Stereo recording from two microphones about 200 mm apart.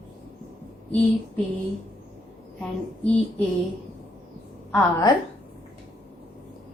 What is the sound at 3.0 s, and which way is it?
Speech, 5° left (ahead or behind).